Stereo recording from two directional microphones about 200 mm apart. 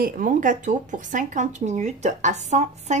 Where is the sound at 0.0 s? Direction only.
40° right (ahead or behind).